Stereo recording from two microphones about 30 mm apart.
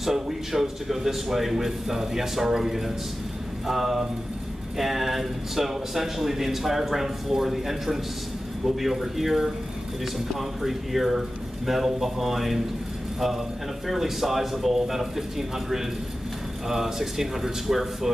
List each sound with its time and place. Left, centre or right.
0.0 s speech: centre
13.8 s speech: centre